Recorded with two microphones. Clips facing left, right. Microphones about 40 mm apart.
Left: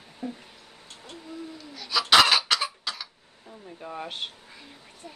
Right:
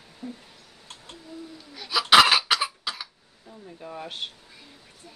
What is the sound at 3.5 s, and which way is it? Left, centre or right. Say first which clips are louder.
Speech: left 1 dB; centre.